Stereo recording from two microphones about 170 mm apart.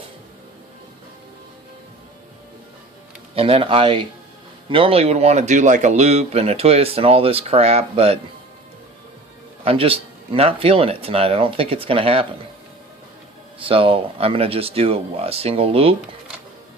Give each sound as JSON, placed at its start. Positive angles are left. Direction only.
{"t": 3.3, "sound": "speech", "side_deg": -35}
{"t": 9.6, "sound": "speech", "side_deg": -35}
{"t": 13.6, "sound": "speech", "side_deg": -30}